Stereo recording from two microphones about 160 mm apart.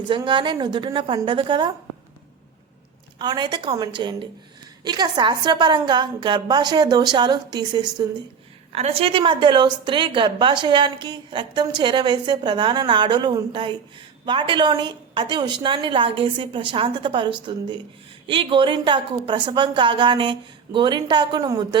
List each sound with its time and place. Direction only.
0.2 s a woman's voice: 30° right (ahead or behind)
3.2 s a woman's voice: 30° right (ahead or behind)
8.7 s a woman's voice: 40° right (ahead or behind)